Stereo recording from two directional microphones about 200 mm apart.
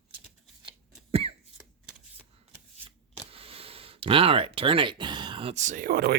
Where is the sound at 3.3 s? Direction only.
30° right (ahead or behind).